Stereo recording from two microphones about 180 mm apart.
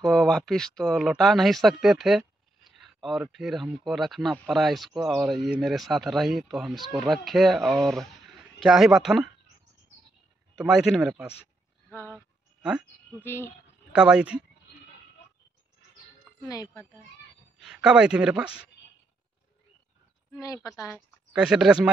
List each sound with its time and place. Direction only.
0.0 s speech: centre (ahead or behind)
10.6 s speech: 5° right (ahead or behind)
11.9 s a sound: 15° left (ahead or behind)
13.2 s speech: 15° left (ahead or behind)
13.9 s speech: 5° right (ahead or behind)
16.4 s speech: 20° left (ahead or behind)
17.6 s speech: 5° right (ahead or behind)
20.3 s speech: 20° left (ahead or behind)
21.3 s speech: 5° right (ahead or behind)